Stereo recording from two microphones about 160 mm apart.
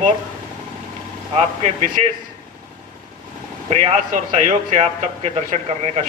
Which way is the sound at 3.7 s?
45° right (ahead or behind).